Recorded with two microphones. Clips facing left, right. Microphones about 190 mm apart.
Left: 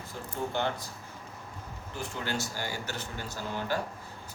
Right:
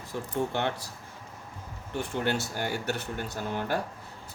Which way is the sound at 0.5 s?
70° right (ahead or behind).